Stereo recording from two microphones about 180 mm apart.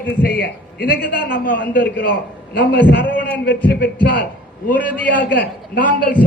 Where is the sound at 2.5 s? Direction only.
65° left (ahead or behind).